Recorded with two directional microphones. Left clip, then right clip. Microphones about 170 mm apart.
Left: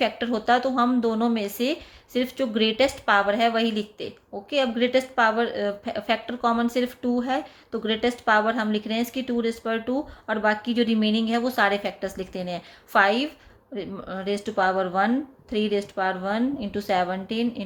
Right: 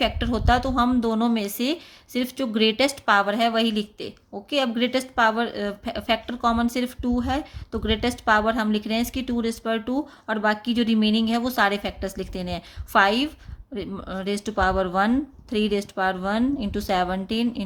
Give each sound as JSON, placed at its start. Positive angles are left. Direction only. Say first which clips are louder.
{"t": 0.0, "sound": "a woman's voice", "louder": "even", "side_deg": -25}